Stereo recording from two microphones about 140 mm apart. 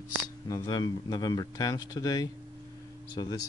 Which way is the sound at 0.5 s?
30° left (ahead or behind).